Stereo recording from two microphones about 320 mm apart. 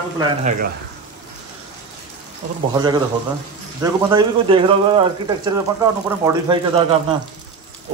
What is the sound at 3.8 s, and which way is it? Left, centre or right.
Speech, centre.